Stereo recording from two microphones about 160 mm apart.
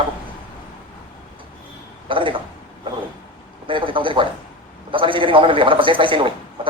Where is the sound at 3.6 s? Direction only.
30° right (ahead or behind).